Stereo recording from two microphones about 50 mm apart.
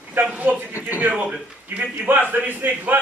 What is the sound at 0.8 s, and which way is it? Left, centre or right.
Speech, left.